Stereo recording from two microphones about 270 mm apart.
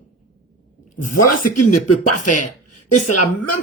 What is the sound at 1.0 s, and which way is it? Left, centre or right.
Speech, left.